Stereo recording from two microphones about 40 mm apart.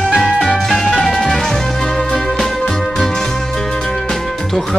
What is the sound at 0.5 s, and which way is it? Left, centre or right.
Music, left.